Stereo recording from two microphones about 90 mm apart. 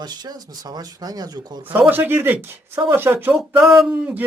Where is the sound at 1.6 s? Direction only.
20° right (ahead or behind).